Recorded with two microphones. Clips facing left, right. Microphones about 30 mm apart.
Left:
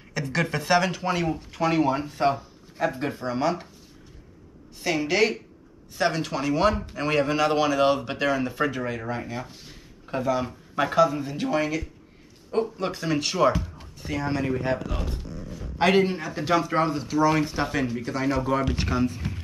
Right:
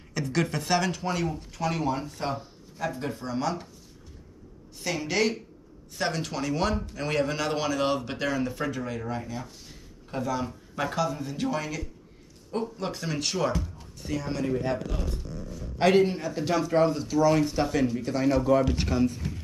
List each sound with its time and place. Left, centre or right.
0.1 s speech: centre
4.8 s speech: centre; by 15.2 s left
15.8 s speech: centre
18.0 s speech: centre